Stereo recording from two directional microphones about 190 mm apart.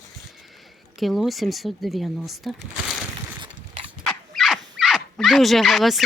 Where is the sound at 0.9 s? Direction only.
Centre (ahead or behind).